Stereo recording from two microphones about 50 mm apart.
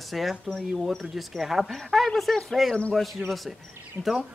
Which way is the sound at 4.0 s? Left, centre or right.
Right.